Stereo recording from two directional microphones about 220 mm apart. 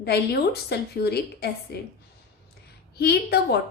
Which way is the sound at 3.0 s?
45° left (ahead or behind).